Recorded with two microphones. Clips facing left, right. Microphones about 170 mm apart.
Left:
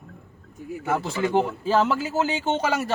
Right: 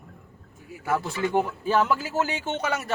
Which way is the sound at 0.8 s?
25° left (ahead or behind).